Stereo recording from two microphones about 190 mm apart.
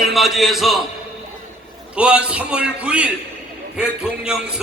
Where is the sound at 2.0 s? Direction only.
5° right (ahead or behind).